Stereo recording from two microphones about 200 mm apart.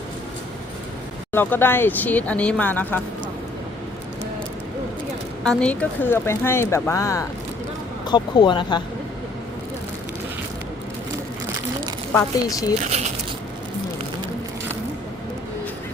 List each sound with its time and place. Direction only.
1.3 s speech: 10° left (ahead or behind)
5.4 s speech: 5° left (ahead or behind); by 8.8 s 25° left (ahead or behind)
12.1 s speech: 15° left (ahead or behind)
12.8 s speech: 35° right (ahead or behind)